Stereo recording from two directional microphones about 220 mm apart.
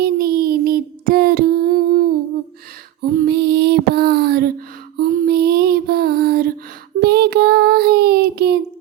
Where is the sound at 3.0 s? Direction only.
45° right (ahead or behind).